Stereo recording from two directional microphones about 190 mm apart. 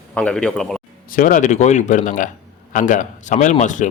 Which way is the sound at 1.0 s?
45° left (ahead or behind).